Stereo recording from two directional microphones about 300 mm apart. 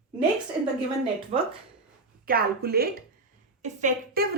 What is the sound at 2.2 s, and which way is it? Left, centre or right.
A woman's voice, right.